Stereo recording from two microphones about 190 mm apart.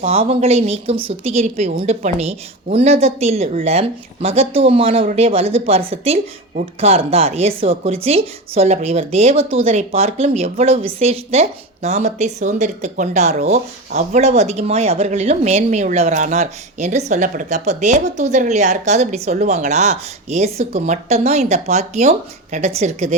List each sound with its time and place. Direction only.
0.0 s a woman's voice: 30° right (ahead or behind)